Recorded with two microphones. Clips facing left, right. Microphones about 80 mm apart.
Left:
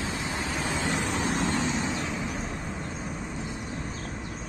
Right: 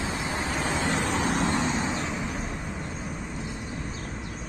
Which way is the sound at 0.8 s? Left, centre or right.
Right.